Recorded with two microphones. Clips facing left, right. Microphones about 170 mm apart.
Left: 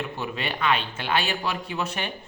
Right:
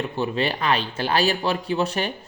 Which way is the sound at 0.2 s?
35° right (ahead or behind).